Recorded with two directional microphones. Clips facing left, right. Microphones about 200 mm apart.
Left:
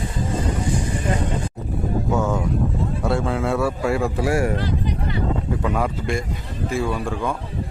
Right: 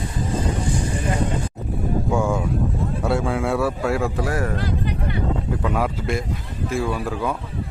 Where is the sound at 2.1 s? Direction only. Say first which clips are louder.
Even; 10° right (ahead or behind).